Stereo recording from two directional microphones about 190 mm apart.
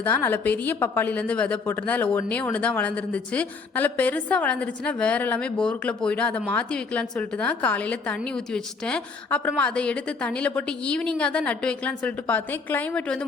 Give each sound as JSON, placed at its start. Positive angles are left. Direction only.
{"t": 0.0, "sound": "a woman's voice", "side_deg": 10}